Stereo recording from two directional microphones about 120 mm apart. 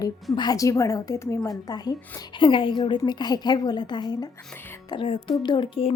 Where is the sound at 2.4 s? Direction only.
45° left (ahead or behind).